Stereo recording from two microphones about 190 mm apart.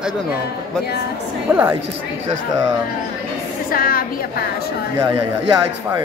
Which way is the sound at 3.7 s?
50° left (ahead or behind).